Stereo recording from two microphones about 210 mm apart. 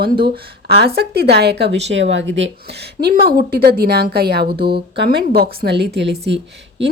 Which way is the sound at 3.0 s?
45° right (ahead or behind).